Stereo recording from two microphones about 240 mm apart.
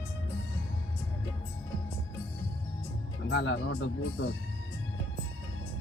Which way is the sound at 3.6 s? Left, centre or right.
Left.